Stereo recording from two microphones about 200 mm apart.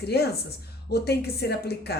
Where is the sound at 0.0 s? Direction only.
55° left (ahead or behind).